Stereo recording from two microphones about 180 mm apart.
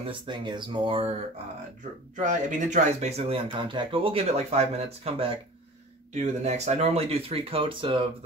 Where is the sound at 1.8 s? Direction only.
45° right (ahead or behind).